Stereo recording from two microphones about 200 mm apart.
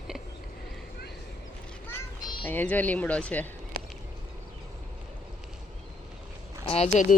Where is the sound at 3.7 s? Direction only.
50° right (ahead or behind).